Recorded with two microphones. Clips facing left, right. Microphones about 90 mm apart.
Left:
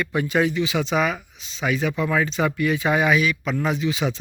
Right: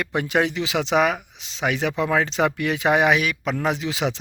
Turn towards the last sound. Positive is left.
turn(degrees=-85)